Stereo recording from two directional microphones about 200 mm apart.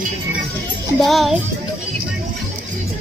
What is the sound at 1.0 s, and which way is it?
Speech, centre (ahead or behind).